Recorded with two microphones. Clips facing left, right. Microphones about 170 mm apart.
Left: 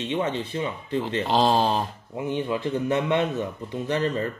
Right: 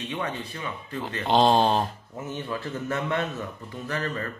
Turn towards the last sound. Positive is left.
turn(degrees=25)  # may be behind; listen again after turning